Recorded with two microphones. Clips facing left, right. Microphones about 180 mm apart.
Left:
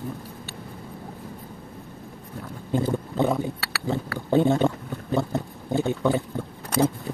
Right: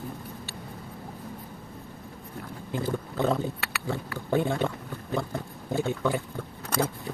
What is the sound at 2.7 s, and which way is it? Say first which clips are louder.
Boat: left 6 dB; 20° left (ahead or behind).